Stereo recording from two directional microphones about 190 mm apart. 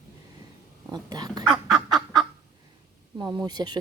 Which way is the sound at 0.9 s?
20° right (ahead or behind).